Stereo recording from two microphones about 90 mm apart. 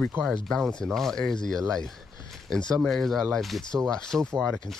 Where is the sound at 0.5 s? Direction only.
10° left (ahead or behind).